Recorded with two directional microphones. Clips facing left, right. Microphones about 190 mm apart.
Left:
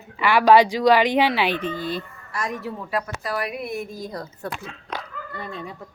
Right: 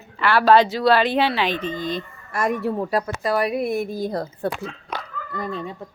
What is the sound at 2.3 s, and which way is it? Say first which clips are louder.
Speech: right 7 dB; 55° right (ahead or behind).